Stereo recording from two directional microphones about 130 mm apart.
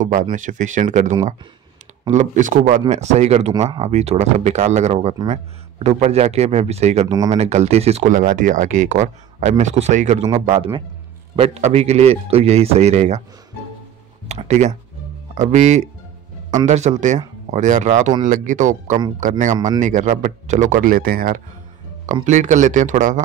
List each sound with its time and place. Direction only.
0.0 s speech: 85° right
2.0 s speech: 70° right (ahead or behind)
2.9 s speech: 60° right (ahead or behind)
11.3 s a man's voice: 45° right (ahead or behind)
14.2 s speech: 60° right (ahead or behind)
18.2 s speech: 85° right
22.0 s speech: 70° right (ahead or behind)